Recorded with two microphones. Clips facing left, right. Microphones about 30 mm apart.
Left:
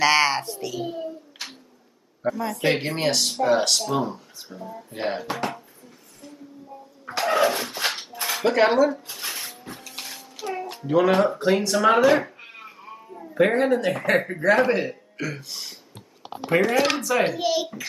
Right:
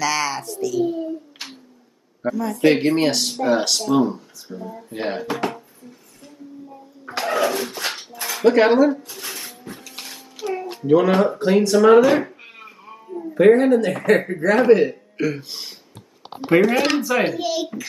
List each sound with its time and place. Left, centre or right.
0.0 s a woman's voice: left
1.4 s humming: centre
2.5 s speech: centre
7.1 s speech: centre
8.3 s cutlery: centre
8.5 s speech: centre
9.1 s a sound: centre
10.9 s speech: centre
15.1 s music: centre
16.9 s music: centre
17.3 s speech: centre